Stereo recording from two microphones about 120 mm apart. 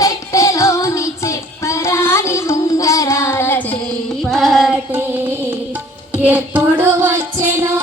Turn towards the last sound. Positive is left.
turn(degrees=-25)  # may be behind; listen again after turning